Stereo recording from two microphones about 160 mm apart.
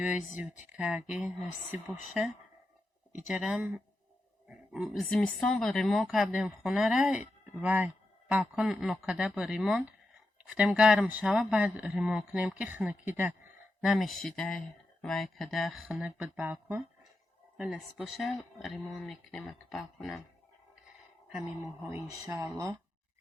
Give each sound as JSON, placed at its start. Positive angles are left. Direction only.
{"t": 0.8, "sound": "speech", "side_deg": -5}
{"t": 13.8, "sound": "speech", "side_deg": 0}
{"t": 21.8, "sound": "speech", "side_deg": -20}